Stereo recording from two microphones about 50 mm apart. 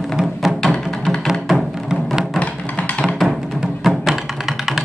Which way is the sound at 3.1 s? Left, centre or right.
Centre.